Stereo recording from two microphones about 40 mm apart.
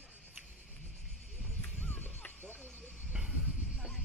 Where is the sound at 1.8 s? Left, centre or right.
Left.